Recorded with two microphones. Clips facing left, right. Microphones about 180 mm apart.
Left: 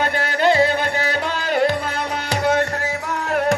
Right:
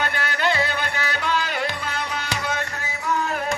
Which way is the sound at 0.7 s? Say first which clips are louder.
Left 6 dB; 45° left (ahead or behind).